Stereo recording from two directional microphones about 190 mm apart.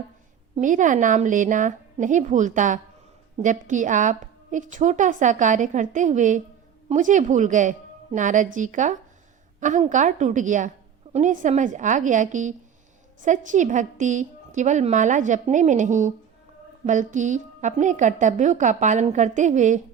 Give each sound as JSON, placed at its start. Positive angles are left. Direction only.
{"t": 0.5, "sound": "a woman's voice", "side_deg": -40}